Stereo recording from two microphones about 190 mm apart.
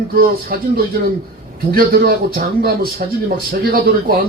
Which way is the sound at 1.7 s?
50° right (ahead or behind).